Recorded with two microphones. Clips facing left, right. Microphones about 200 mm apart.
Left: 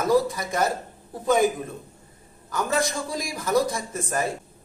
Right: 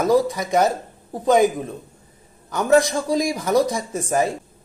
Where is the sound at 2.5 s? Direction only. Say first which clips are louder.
Right 8 dB; 20° right (ahead or behind).